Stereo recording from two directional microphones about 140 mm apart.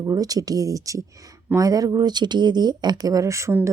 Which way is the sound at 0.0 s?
25° right (ahead or behind).